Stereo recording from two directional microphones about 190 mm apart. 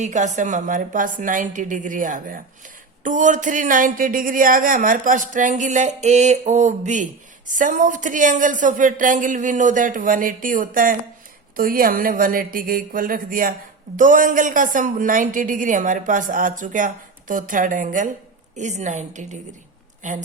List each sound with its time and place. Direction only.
0.0 s a woman's voice: 40° right (ahead or behind)